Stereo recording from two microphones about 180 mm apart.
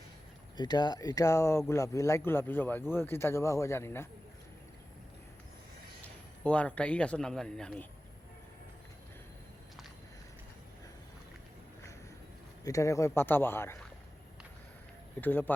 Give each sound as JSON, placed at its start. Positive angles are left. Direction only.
{"t": 0.5, "sound": "speech", "side_deg": 25}
{"t": 6.4, "sound": "speech", "side_deg": 5}
{"t": 12.6, "sound": "speech", "side_deg": 15}
{"t": 15.2, "sound": "speech", "side_deg": 10}